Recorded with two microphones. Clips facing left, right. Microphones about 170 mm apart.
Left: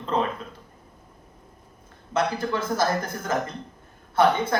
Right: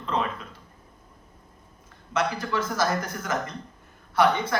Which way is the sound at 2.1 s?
30° left (ahead or behind).